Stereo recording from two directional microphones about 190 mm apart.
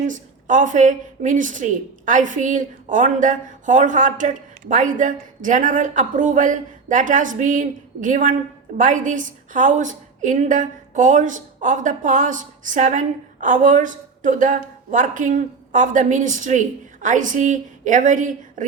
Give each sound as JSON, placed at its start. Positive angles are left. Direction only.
{"t": 0.1, "sound": "a woman's voice", "side_deg": -45}